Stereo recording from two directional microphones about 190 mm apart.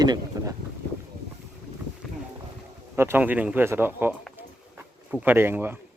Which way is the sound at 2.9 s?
10° right (ahead or behind).